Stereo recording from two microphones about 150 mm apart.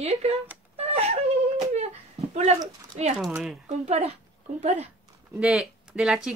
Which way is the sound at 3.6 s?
45° right (ahead or behind).